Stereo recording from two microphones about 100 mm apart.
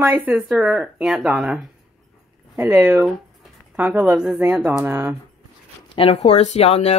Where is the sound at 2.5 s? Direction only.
30° right (ahead or behind).